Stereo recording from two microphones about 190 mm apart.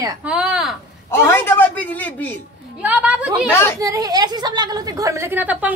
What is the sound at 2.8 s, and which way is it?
Speech, 10° right (ahead or behind).